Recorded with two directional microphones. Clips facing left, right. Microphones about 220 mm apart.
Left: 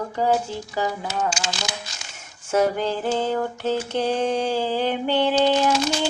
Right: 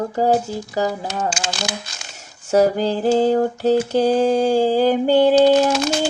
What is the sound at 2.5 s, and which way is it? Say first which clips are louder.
Mantra: right 5 dB; 35° right (ahead or behind).